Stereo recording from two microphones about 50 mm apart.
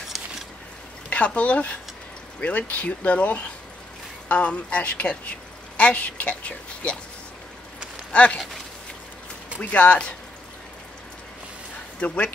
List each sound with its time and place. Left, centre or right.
1.1 s a woman's voice: left
8.1 s speech: left
9.6 s a woman's voice: left